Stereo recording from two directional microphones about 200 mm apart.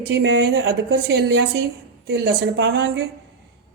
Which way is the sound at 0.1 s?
65° right (ahead or behind).